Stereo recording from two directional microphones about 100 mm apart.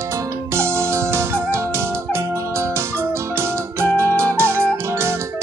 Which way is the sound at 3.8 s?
30° right (ahead or behind).